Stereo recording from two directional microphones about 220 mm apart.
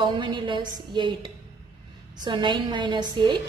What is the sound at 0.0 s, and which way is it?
A woman's voice, 20° right (ahead or behind).